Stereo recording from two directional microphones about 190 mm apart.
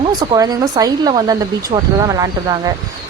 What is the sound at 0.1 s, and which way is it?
Speech, 20° right (ahead or behind).